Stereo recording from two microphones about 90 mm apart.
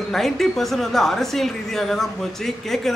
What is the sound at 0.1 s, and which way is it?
A woman's voice, 5° left (ahead or behind).